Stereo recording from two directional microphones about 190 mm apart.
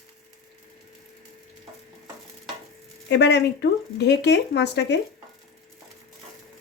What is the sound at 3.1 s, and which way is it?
Speech, 65° left (ahead or behind).